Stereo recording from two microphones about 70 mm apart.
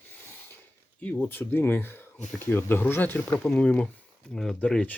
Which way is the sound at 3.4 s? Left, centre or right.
Centre.